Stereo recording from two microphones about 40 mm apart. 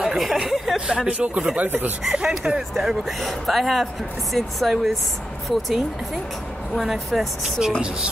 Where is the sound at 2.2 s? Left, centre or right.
Centre.